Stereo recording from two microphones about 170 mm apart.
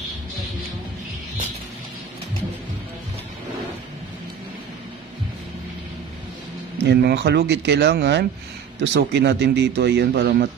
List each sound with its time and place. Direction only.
6.9 s speech: 80° right
8.8 s speech: 90° right